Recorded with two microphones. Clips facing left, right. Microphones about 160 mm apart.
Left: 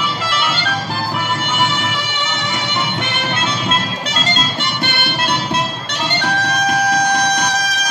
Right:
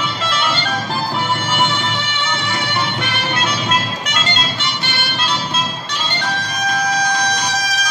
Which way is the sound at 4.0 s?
35° left (ahead or behind).